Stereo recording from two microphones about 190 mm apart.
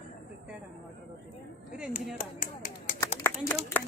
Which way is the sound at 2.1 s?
45° left (ahead or behind).